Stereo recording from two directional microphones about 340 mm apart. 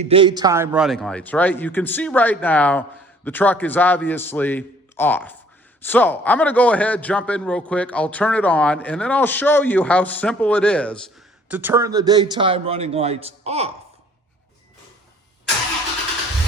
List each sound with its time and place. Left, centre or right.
0.0 s a man's voice: centre